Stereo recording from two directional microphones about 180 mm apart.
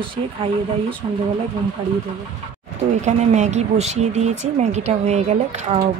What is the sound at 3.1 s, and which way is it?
Speech, 40° right (ahead or behind).